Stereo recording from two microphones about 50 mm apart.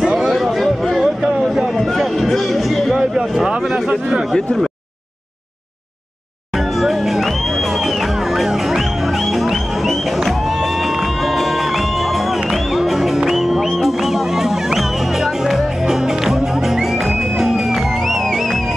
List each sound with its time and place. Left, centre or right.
0.0 s a sound: centre
0.3 s chatter: centre
1.4 s a sound: centre
3.6 s speech: centre
6.5 s music: centre
18.0 s music: centre